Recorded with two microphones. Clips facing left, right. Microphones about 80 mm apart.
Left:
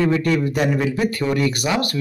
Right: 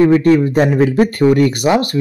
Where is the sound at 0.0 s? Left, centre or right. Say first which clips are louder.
Right 8 dB; right.